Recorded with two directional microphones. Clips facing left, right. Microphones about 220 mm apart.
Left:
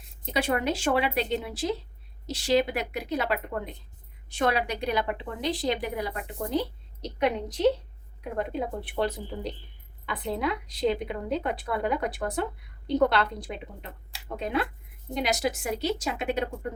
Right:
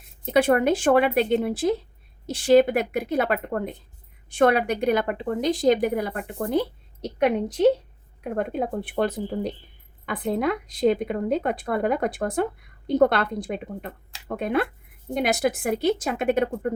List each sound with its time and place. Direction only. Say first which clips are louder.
0.3 s a woman's voice: right 8 dB; 50° right (ahead or behind)